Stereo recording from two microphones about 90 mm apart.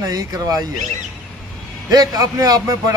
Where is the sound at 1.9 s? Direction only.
45° right (ahead or behind).